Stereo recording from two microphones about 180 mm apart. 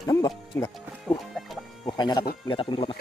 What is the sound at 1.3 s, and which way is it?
Music, centre (ahead or behind).